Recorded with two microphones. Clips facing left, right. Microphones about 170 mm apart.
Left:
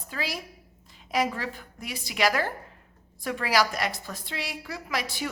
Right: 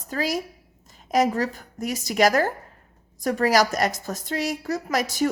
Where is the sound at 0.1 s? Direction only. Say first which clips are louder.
Right 8 dB; 45° right (ahead or behind).